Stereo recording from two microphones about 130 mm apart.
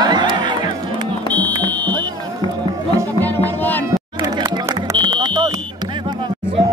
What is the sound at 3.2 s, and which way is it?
Music, 15° left (ahead or behind).